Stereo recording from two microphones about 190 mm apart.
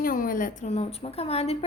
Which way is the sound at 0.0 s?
45° left (ahead or behind).